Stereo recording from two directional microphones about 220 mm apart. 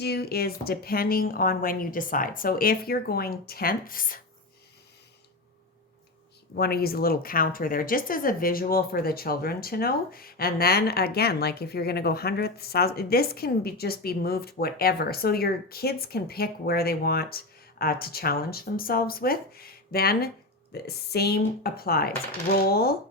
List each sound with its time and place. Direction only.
0.0 s speech: 45° left (ahead or behind)
6.6 s speech: 45° left (ahead or behind)